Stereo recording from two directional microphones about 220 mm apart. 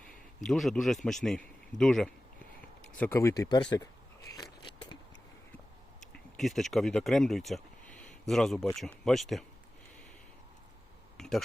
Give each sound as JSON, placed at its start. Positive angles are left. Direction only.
{"t": 0.4, "sound": "a man's voice", "side_deg": 0}
{"t": 6.3, "sound": "a man's voice", "side_deg": 0}
{"t": 11.2, "sound": "speech", "side_deg": 0}